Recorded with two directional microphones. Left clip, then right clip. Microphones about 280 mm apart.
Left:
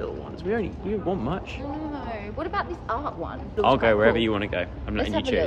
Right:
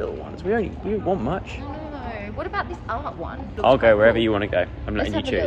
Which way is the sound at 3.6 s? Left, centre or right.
Centre.